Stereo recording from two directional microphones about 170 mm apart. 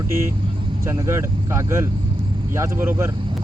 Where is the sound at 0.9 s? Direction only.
15° right (ahead or behind).